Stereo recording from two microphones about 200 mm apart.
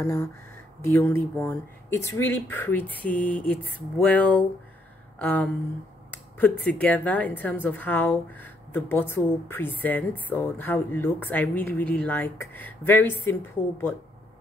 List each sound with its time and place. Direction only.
0.0 s a woman's voice: 15° left (ahead or behind)
6.1 s a sound: 10° left (ahead or behind)
6.6 s a woman's voice: 5° left (ahead or behind)